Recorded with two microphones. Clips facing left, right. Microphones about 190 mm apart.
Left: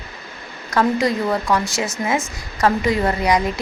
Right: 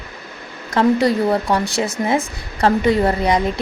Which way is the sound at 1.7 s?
60° right (ahead or behind).